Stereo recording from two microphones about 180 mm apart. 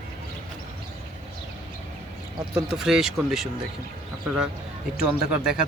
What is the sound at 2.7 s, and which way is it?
Speech, 5° right (ahead or behind).